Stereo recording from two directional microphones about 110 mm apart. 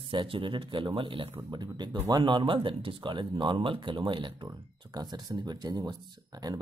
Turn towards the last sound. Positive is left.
turn(degrees=-35)  # may be behind; listen again after turning